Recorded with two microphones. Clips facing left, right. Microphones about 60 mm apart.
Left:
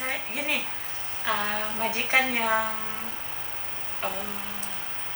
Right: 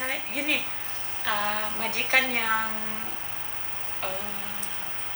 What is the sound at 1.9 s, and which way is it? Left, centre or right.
Speech, right.